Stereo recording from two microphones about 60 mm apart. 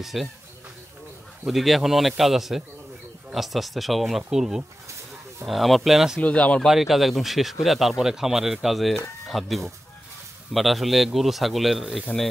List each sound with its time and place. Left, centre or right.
0.0 s speech: centre
1.5 s speech: centre
6.2 s speech: left
6.7 s speech: centre